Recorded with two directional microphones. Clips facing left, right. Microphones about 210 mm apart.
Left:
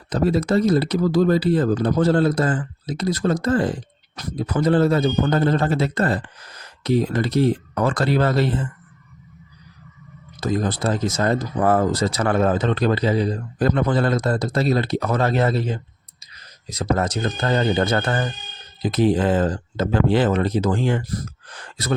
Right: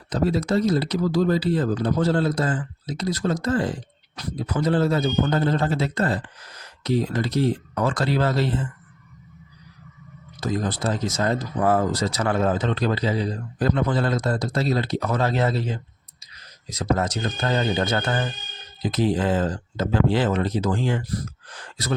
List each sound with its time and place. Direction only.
0.1 s speech: 55° left (ahead or behind)
10.4 s speech: 55° left (ahead or behind)